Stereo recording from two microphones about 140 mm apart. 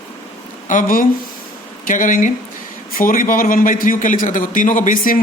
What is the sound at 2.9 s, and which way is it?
A man's voice, 80° left.